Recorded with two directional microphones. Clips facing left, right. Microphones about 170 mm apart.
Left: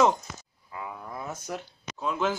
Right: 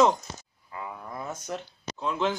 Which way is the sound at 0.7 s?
Centre (ahead or behind).